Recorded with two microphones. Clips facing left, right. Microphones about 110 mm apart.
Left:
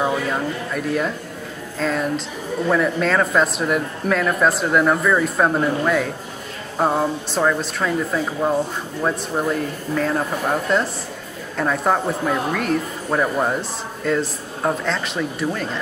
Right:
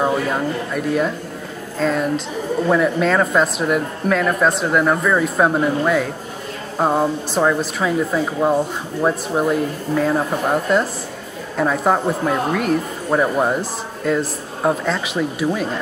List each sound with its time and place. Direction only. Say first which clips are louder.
0.3 s speech: right 2 dB; centre (ahead or behind)